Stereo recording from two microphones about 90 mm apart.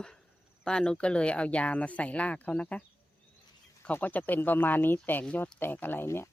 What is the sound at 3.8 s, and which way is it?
Speech, 20° left (ahead or behind).